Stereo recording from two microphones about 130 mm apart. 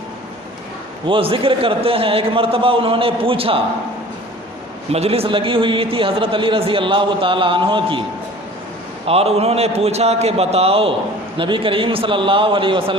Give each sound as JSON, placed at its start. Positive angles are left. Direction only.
{"t": 1.0, "sound": "a man's voice", "side_deg": -40}
{"t": 4.9, "sound": "a man's voice", "side_deg": -50}
{"t": 9.0, "sound": "a man's voice", "side_deg": -50}